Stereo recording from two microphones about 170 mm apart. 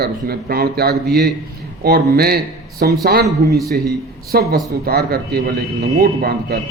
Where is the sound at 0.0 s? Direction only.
65° right (ahead or behind).